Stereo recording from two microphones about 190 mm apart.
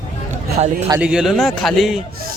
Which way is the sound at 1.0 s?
5° right (ahead or behind).